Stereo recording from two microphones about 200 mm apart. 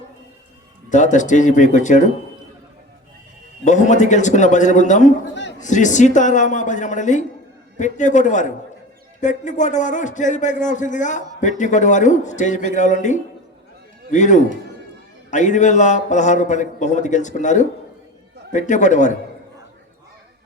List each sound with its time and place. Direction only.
0.9 s a man's voice: 40° left (ahead or behind)
3.6 s a man's voice: 35° left (ahead or behind)
5.3 s a sound: 60° left (ahead or behind)
5.5 s a man's voice: 40° left (ahead or behind)